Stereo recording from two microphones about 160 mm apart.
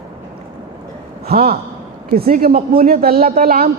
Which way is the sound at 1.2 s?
70° right (ahead or behind).